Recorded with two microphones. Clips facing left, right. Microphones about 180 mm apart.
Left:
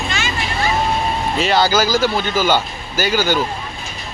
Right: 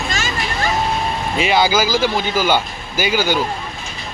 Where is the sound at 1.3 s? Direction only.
10° right (ahead or behind).